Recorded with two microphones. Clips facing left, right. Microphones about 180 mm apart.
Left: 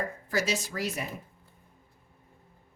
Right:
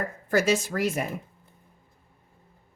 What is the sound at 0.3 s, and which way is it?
Speech, 50° right (ahead or behind).